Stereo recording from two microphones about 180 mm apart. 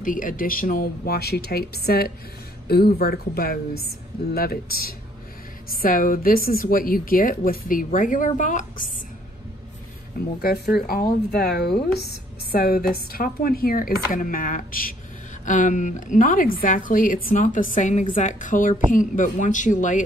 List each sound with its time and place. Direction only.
0.0 s a woman's voice: 50° left (ahead or behind)
10.4 s a woman's voice: 60° left (ahead or behind); by 20.0 s 45° left (ahead or behind)